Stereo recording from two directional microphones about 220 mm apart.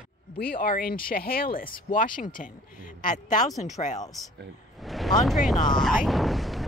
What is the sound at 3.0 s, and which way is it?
Speech, 35° left (ahead or behind).